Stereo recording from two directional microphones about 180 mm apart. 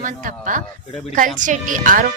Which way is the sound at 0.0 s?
45° right (ahead or behind).